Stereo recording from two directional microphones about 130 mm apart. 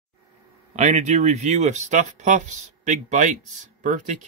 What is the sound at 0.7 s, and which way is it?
Speech, 65° right (ahead or behind).